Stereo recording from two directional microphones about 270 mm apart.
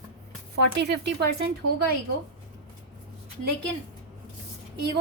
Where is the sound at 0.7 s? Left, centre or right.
Right.